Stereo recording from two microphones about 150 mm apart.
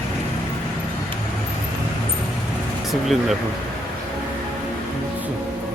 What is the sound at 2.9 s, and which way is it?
Speech, centre (ahead or behind).